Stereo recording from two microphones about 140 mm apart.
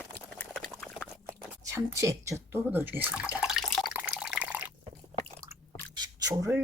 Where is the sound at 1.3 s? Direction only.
20° right (ahead or behind); by 3.9 s centre (ahead or behind).